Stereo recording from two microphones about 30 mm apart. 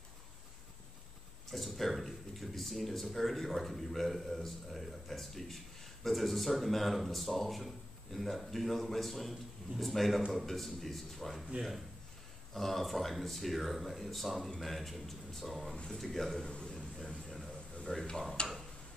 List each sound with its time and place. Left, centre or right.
1.5 s speech: centre
12.5 s speech: centre
15.7 s speech: left
16.0 s speech: centre
16.4 s a sound: left
17.9 s speech: left
18.4 s tick-tock: left